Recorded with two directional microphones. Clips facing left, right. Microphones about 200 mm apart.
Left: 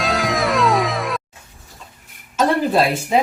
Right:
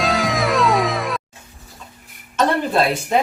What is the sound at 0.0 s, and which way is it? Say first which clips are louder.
Music: even; centre (ahead or behind).